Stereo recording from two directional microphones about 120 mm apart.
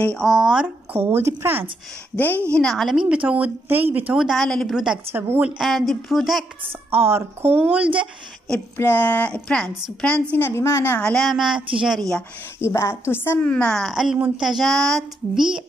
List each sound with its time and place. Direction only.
0.0 s speech: 5° left (ahead or behind); by 1.7 s 20° right (ahead or behind)
2.5 s a woman's voice: 5° left (ahead or behind)
5.1 s a woman's voice: 20° right (ahead or behind)
5.6 s a woman's voice: centre (ahead or behind)
6.9 s speech: 20° right (ahead or behind)
8.7 s a woman's voice: 15° left (ahead or behind)
10.3 s a woman's voice: 20° left (ahead or behind)
11.1 s a woman's voice: centre (ahead or behind)
12.5 s a woman's voice: 20° left (ahead or behind); by 15.4 s 5° left (ahead or behind)